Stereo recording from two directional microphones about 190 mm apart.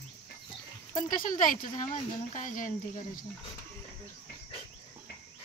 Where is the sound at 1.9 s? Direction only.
40° left (ahead or behind).